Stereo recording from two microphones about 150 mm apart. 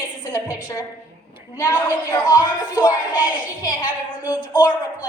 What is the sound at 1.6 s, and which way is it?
A man's voice, 25° left (ahead or behind).